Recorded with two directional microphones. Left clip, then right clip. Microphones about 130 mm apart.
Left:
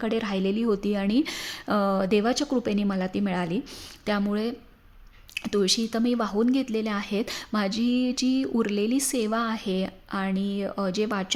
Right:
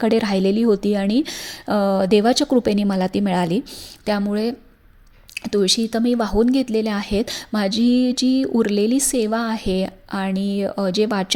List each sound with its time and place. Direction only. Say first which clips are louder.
0.0 s a woman's voice: right 9 dB; 40° right (ahead or behind)
4.0 s speech: right 6 dB; 25° right (ahead or behind)